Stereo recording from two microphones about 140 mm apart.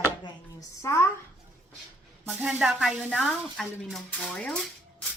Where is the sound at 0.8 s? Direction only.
20° left (ahead or behind).